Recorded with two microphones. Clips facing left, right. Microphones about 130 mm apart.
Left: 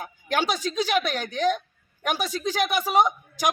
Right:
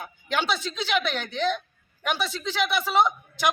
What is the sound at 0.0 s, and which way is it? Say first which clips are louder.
Speech: left 2 dB; 45° left (ahead or behind).